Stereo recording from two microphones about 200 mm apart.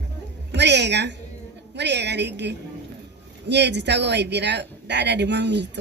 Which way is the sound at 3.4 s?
60° right (ahead or behind).